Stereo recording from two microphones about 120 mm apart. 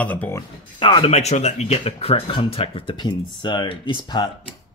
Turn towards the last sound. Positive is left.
turn(degrees=40)  # may be behind; listen again after turning